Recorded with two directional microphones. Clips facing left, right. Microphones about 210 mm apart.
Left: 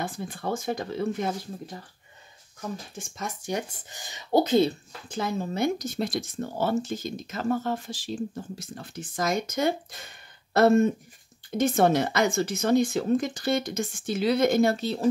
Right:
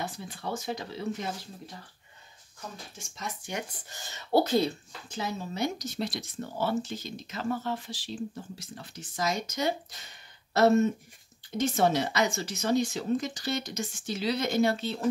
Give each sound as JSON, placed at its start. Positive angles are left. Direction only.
{"t": 0.0, "sound": "speech", "side_deg": 50}
{"t": 3.0, "sound": "speech", "side_deg": 50}
{"t": 3.9, "sound": "speech", "side_deg": 15}
{"t": 5.0, "sound": "speech", "side_deg": 55}